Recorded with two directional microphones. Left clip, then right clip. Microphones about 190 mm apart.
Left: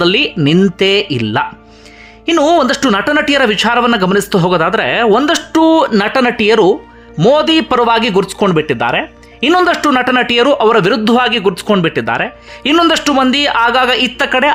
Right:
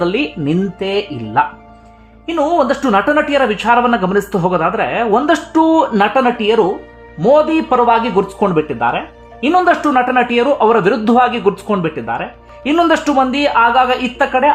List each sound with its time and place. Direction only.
0.0 s a man's voice: 20° left (ahead or behind)
12.7 s speech: 10° left (ahead or behind)